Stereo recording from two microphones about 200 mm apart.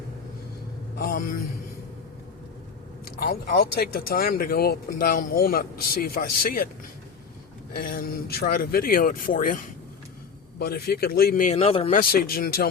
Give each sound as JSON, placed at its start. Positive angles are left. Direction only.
{"t": 0.9, "sound": "a man's voice", "side_deg": 45}
{"t": 3.2, "sound": "speech", "side_deg": 50}
{"t": 7.7, "sound": "speech", "side_deg": 45}
{"t": 10.6, "sound": "speech", "side_deg": 50}
{"t": 11.5, "sound": "speech", "side_deg": 30}
{"t": 12.0, "sound": "speech", "side_deg": 50}